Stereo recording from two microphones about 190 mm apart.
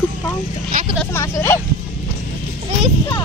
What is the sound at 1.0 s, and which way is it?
Speech, 15° left (ahead or behind).